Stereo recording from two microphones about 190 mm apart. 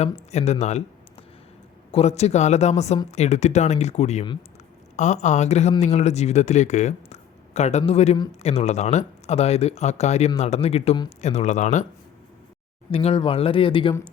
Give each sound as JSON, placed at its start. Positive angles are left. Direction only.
{"t": 0.0, "sound": "speech", "side_deg": 35}
{"t": 1.9, "sound": "speech", "side_deg": 35}
{"t": 12.9, "sound": "speech", "side_deg": 30}